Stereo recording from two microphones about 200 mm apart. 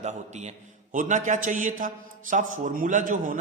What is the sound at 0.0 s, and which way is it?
A man's voice, 35° right (ahead or behind).